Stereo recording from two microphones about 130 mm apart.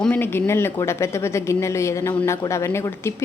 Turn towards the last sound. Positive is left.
turn(degrees=20)  # may be behind; listen again after turning